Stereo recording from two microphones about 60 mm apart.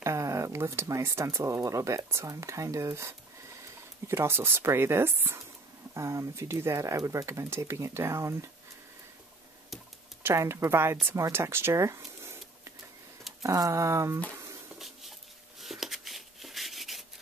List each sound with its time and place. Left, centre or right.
0.0 s a sound: right
0.8 s speech: right
5.9 s speech: right
10.2 s speech: right
13.4 s speech: right
15.6 s rub: centre